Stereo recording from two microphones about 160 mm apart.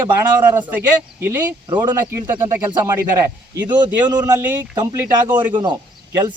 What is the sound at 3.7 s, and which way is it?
Speech, 25° right (ahead or behind).